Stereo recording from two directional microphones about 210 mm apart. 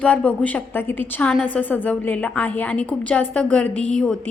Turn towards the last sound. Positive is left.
turn(degrees=5)  # may be behind; listen again after turning